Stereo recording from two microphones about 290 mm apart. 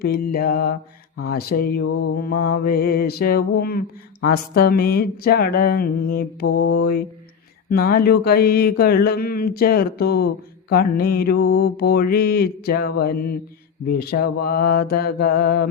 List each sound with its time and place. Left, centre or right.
0.0 s speech: left